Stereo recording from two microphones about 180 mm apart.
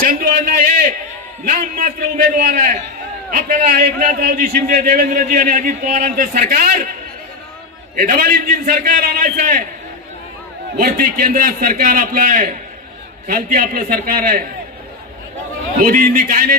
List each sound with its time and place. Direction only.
0.0 s a sound: 50° right (ahead or behind)
1.4 s a man's voice: 50° right (ahead or behind)
10.8 s a man's voice: 50° right (ahead or behind)
15.8 s a man's voice: 50° right (ahead or behind)